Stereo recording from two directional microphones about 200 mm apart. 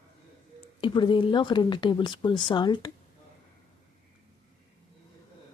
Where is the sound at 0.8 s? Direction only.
25° left (ahead or behind).